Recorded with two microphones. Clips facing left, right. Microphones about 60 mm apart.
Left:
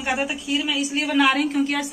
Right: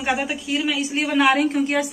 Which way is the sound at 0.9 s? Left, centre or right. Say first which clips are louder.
Right 1 dB; right.